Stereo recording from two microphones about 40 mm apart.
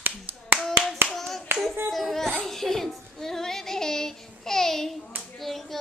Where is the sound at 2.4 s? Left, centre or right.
Centre.